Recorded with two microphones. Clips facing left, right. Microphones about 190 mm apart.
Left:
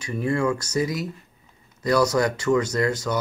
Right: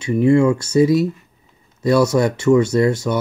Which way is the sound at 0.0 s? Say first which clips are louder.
Right 10 dB; 25° right (ahead or behind).